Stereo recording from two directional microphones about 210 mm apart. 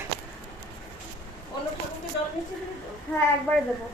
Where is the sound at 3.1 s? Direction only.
10° left (ahead or behind).